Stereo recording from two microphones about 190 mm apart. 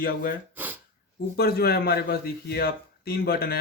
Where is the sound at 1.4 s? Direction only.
55° left (ahead or behind).